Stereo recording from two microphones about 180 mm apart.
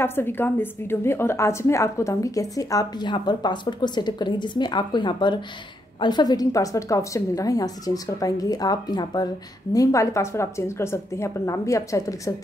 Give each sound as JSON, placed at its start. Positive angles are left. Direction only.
{"t": 0.0, "sound": "a woman's voice", "side_deg": 10}